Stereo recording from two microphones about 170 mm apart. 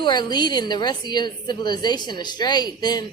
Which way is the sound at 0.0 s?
25° left (ahead or behind).